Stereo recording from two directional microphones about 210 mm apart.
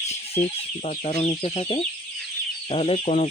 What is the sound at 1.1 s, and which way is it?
Speech, 25° left (ahead or behind).